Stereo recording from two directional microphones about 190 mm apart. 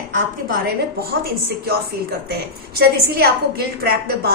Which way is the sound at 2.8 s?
55° right (ahead or behind).